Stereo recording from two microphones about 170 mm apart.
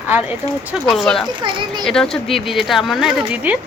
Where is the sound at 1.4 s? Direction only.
25° right (ahead or behind).